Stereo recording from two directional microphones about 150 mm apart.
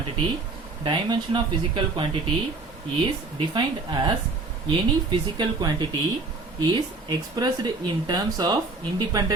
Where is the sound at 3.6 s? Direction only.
30° right (ahead or behind).